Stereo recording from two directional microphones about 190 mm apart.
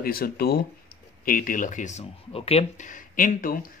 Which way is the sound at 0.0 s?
50° left (ahead or behind).